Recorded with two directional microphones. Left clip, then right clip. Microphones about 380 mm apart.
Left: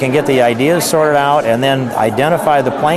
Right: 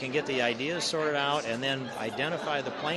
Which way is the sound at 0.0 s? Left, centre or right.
Centre.